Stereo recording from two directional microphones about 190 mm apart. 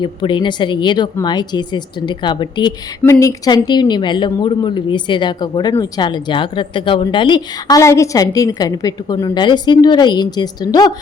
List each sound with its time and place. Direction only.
0.0 s a woman's voice: 25° left (ahead or behind)